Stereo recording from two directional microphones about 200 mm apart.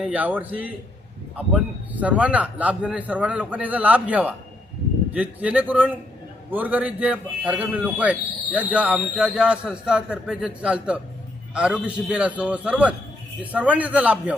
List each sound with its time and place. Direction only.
0.0 s a man's voice: 5° right (ahead or behind)